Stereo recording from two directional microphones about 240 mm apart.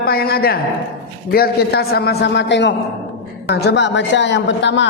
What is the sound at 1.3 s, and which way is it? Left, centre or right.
A man's voice, left.